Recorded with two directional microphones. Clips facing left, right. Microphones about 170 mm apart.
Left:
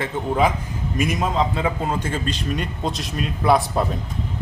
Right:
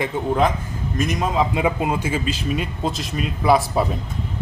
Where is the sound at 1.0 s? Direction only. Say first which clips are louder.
Even; 5° left (ahead or behind).